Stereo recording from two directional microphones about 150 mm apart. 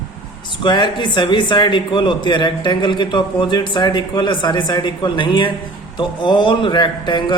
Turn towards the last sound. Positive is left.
turn(degrees=30)  # may be behind; listen again after turning